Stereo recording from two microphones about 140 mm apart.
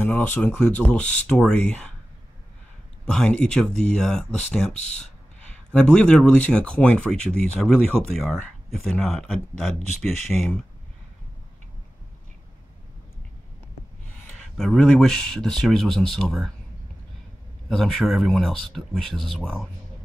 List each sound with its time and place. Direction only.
0.0 s speech: 10° left (ahead or behind)
3.1 s speech: 5° left (ahead or behind)
4.7 s speech: 55° left (ahead or behind)
5.7 s speech: 10° left (ahead or behind)
14.6 s speech: centre (ahead or behind)
17.6 s speech: centre (ahead or behind)